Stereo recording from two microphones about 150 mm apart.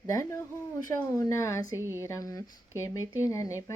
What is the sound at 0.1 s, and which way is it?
Speech, 20° left (ahead or behind).